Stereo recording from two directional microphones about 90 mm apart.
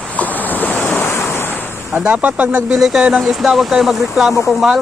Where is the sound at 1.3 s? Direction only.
25° left (ahead or behind).